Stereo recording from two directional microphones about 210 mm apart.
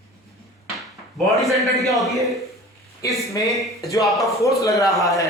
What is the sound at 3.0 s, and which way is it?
Speech, 15° left (ahead or behind).